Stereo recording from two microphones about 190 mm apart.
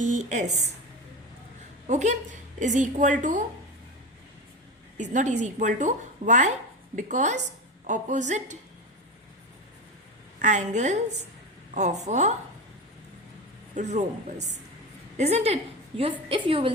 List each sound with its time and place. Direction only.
0.0 s speech: 40° right (ahead or behind)
1.9 s speech: 40° right (ahead or behind)
4.9 s speech: 40° right (ahead or behind)
10.4 s speech: 40° right (ahead or behind)
13.7 s a woman's voice: 40° right (ahead or behind)